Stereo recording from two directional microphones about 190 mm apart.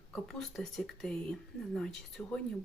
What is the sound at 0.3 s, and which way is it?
Speech, centre (ahead or behind).